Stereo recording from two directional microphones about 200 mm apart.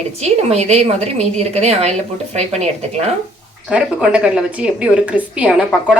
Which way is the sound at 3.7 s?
5° right (ahead or behind).